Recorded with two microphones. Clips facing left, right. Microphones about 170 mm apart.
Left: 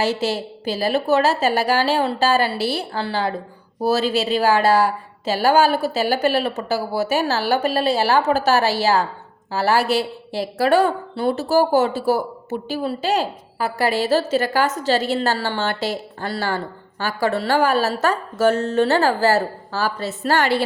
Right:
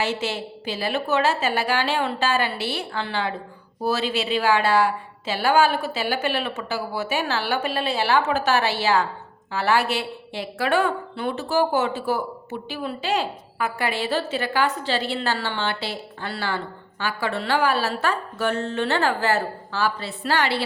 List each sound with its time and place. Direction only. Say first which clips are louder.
0.0 s a woman's voice: left 5 dB; 40° left (ahead or behind)